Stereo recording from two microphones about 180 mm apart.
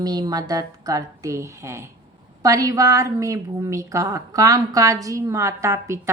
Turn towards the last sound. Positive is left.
turn(degrees=-15)  # may be behind; listen again after turning